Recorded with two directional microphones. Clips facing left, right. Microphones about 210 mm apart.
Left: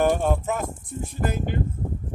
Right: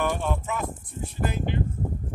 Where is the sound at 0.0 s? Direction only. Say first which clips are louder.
Left 6 dB; 45° left (ahead or behind).